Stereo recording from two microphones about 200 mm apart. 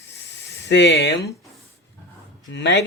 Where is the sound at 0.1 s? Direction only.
60° left (ahead or behind).